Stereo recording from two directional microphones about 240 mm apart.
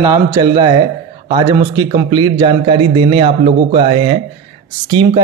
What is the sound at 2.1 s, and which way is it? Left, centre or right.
Speech, centre.